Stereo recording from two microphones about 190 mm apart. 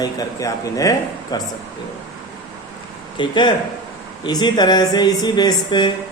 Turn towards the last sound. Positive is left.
turn(degrees=20)  # may be behind; listen again after turning